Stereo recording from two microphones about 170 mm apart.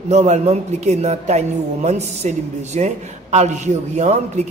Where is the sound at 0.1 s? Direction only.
40° right (ahead or behind).